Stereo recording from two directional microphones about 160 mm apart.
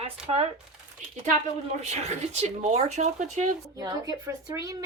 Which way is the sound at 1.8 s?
45° right (ahead or behind).